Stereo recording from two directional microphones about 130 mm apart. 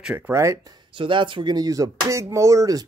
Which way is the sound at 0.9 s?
40° right (ahead or behind).